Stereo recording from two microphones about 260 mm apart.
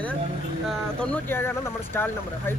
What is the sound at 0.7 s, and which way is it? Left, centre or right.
Speech, centre.